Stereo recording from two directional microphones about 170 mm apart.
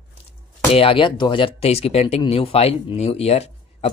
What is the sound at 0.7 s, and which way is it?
Speech, 30° left (ahead or behind).